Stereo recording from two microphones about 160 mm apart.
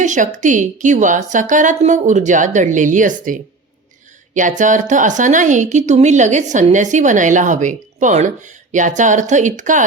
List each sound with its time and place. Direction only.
0.0 s a woman's voice: 50° right (ahead or behind)